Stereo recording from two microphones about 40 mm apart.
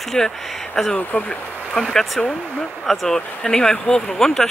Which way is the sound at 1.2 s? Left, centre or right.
Left.